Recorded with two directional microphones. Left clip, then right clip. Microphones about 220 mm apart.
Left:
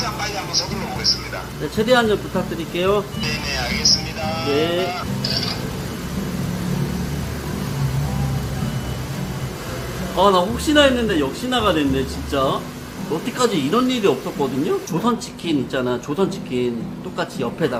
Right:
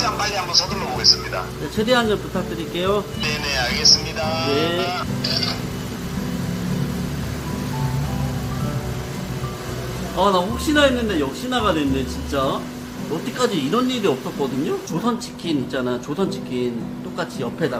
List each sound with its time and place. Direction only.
0.0 s music: 30° right (ahead or behind)
1.8 s speech: centre (ahead or behind)
3.2 s speech: 20° right (ahead or behind)
4.5 s speech: centre (ahead or behind)
10.2 s a man's voice: 10° left (ahead or behind)
13.7 s a man's voice: 5° left (ahead or behind)